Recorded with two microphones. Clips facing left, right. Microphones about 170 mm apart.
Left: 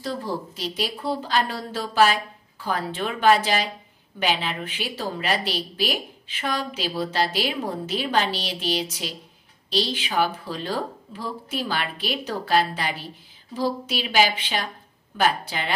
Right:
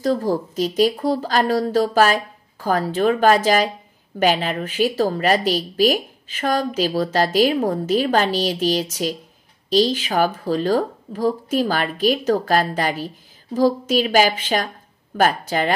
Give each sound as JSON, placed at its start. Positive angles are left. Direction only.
{"t": 0.0, "sound": "speech", "side_deg": -45}